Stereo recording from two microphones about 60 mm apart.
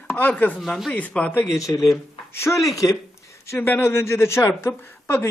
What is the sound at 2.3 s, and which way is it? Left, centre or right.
Speech, left.